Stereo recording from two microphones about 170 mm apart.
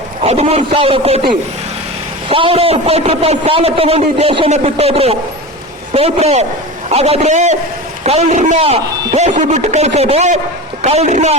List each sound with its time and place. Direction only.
0.2 s a man's voice: 35° right (ahead or behind)
2.3 s a man's voice: 35° right (ahead or behind)